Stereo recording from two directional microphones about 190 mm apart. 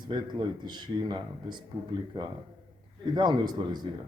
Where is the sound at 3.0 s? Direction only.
20° right (ahead or behind).